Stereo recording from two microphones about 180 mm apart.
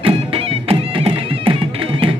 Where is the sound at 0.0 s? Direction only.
30° right (ahead or behind).